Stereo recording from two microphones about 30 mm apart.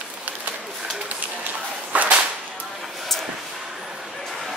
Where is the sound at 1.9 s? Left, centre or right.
Right.